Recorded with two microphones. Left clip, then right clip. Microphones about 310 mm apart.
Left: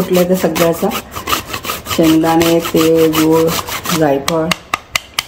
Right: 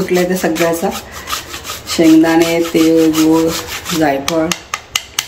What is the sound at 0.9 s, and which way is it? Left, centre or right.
Rub, left.